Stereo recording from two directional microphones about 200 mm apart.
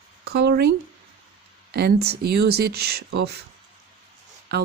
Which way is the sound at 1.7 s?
55° right (ahead or behind).